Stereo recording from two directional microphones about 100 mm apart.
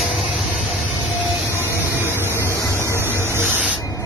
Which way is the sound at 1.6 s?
25° right (ahead or behind).